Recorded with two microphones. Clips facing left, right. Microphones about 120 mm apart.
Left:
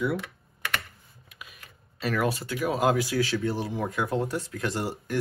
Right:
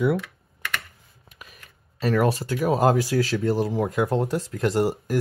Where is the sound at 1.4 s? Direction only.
45° right (ahead or behind).